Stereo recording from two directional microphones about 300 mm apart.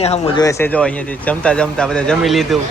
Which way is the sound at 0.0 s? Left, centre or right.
Centre.